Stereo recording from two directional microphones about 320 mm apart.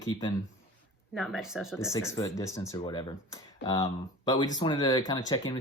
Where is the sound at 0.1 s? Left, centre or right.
Centre.